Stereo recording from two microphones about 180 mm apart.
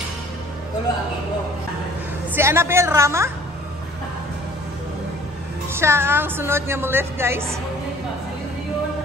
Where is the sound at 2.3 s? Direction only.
15° right (ahead or behind).